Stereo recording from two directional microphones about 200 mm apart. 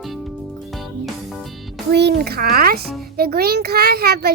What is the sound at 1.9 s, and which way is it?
A child's voice, 55° right (ahead or behind).